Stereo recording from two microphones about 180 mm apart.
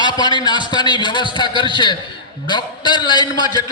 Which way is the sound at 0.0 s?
25° left (ahead or behind).